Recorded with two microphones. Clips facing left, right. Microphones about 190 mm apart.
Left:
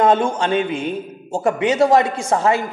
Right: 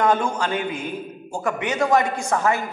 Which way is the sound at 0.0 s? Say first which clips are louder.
Left 4 dB; 25° left (ahead or behind).